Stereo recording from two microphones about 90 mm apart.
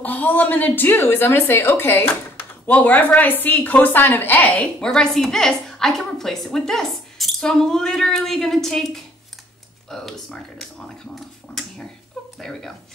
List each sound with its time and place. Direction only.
0.0 s a woman's voice: 20° left (ahead or behind)
12.4 s speech: 5° left (ahead or behind)